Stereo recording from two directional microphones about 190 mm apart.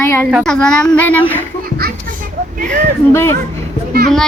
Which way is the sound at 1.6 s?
50° right (ahead or behind).